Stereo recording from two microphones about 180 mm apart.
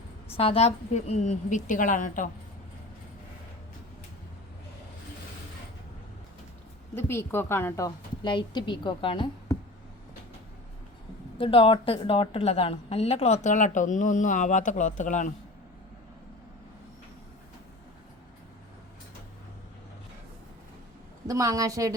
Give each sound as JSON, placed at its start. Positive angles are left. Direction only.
{"t": 0.3, "sound": "a woman's voice", "side_deg": 30}
{"t": 6.9, "sound": "a woman's voice", "side_deg": 15}
{"t": 11.3, "sound": "a woman's voice", "side_deg": 30}
{"t": 21.2, "sound": "a woman's voice", "side_deg": -20}